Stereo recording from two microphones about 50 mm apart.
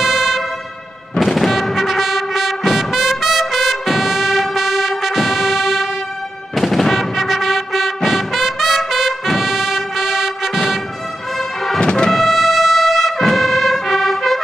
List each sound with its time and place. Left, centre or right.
0.0 s music: centre
11.8 s music: centre
12.1 s brass instrument: centre